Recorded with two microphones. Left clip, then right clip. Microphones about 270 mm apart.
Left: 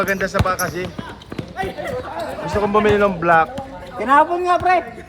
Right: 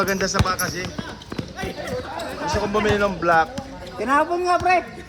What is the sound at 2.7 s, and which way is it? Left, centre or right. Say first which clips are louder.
Speech: left 6 dB; left.